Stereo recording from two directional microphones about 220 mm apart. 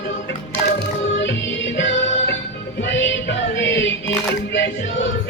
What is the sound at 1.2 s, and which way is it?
Music, 55° left (ahead or behind).